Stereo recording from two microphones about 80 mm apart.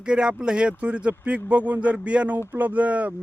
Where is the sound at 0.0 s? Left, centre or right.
Centre.